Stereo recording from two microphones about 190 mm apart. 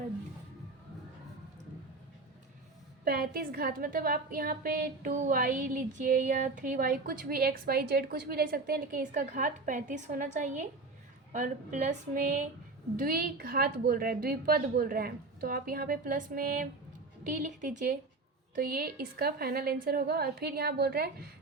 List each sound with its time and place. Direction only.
3.0 s a woman's voice: 55° right (ahead or behind)